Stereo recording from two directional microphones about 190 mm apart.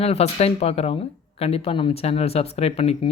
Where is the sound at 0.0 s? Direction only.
35° left (ahead or behind).